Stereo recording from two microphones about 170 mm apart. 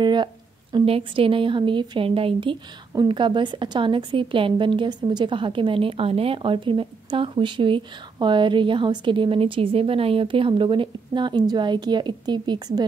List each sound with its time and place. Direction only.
0.0 s a woman's voice: 25° right (ahead or behind)